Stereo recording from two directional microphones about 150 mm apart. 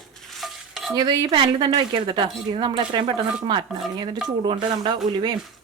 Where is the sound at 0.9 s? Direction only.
25° right (ahead or behind).